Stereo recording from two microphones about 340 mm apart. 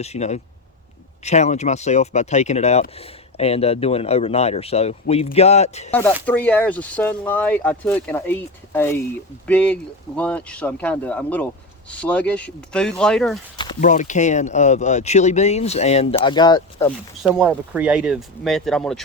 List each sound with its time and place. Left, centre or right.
0.0 s speech: centre
5.9 s speech: centre
13.6 s speech: centre
17.2 s speech: centre